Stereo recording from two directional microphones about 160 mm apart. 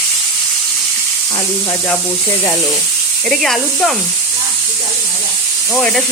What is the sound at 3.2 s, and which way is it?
Speech, centre (ahead or behind).